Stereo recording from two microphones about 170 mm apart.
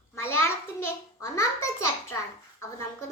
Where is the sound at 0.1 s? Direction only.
15° left (ahead or behind).